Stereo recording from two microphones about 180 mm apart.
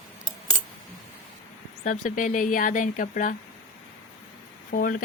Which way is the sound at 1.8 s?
45° left (ahead or behind).